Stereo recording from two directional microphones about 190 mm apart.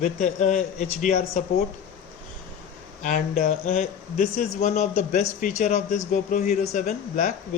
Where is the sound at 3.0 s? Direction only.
45° left (ahead or behind).